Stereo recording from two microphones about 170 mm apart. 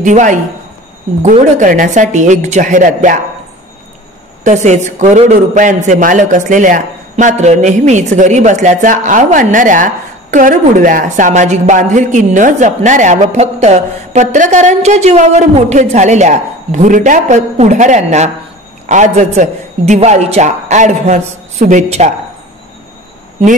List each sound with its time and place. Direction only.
0.0 s a woman's voice: 45° right (ahead or behind)
4.5 s a woman's voice: 45° right (ahead or behind)